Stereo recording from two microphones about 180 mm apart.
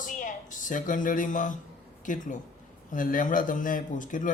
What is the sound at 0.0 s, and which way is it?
A man's voice, 45° left (ahead or behind).